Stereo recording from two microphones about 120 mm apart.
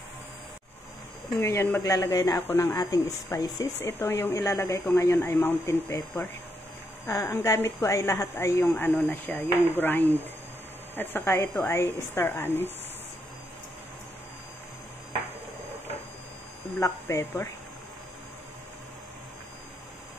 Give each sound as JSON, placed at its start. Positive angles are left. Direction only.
{"t": 1.4, "sound": "a woman's voice", "side_deg": 20}
{"t": 7.1, "sound": "a woman's voice", "side_deg": 20}
{"t": 16.8, "sound": "a woman's voice", "side_deg": 20}